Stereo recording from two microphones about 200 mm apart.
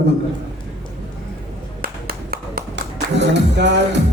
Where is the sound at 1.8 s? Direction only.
45° right (ahead or behind).